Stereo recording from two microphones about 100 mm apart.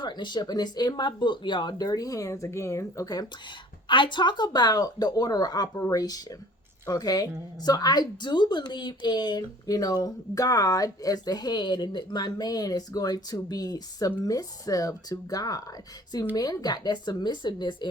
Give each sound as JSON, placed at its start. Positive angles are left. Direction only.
{"t": 0.0, "sound": "a woman's voice", "side_deg": 50}
{"t": 3.8, "sound": "a woman's voice", "side_deg": 55}